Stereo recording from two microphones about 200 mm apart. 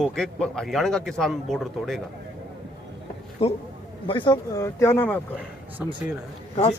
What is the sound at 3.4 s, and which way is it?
Speech, 30° left (ahead or behind).